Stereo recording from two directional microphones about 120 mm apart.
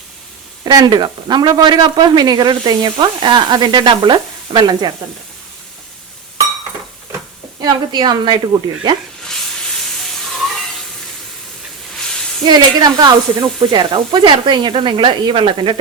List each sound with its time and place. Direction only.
0.6 s a man's voice: 35° right (ahead or behind)
7.6 s a man's voice: 35° right (ahead or behind)
10.0 s sizzle: centre (ahead or behind)
12.5 s a man's voice: 35° right (ahead or behind)